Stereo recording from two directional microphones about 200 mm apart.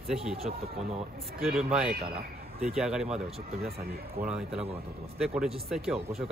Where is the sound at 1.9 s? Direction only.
50° right (ahead or behind).